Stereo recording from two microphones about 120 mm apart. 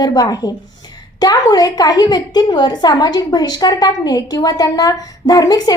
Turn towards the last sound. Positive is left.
turn(degrees=30)  # may be behind; listen again after turning